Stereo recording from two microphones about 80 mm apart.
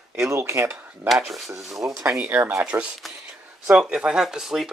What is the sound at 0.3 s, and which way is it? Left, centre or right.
Speech, right.